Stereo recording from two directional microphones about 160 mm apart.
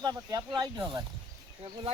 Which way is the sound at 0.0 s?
25° right (ahead or behind).